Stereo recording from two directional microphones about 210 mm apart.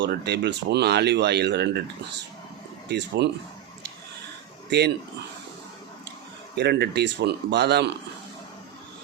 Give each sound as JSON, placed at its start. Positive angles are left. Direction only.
{"t": 0.0, "sound": "speech", "side_deg": -55}
{"t": 2.9, "sound": "speech", "side_deg": -55}
{"t": 6.6, "sound": "speech", "side_deg": -50}